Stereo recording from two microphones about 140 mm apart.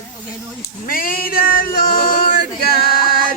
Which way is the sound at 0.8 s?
85° left.